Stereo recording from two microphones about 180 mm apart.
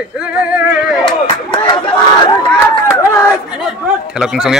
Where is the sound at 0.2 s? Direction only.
5° right (ahead or behind).